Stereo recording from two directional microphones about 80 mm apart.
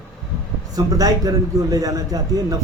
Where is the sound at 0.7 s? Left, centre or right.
Right.